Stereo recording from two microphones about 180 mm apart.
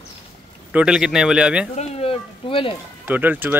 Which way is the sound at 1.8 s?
35° left (ahead or behind).